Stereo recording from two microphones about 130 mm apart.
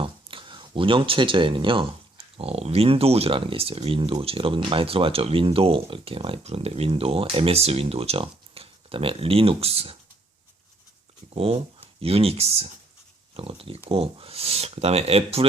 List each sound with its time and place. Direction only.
0.0 s speech: 40° right (ahead or behind)
11.3 s speech: 45° right (ahead or behind)